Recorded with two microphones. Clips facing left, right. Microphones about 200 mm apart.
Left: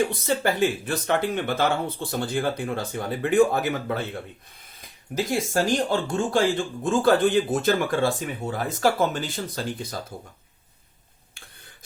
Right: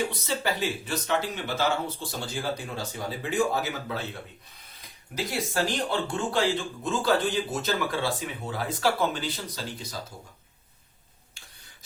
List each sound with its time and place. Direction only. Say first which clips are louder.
0.0 s speech: left 6 dB; 50° left (ahead or behind)
5.1 s speech: left 5 dB; 45° left (ahead or behind)